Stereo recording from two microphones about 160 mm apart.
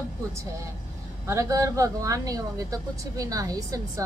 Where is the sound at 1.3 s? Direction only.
20° right (ahead or behind).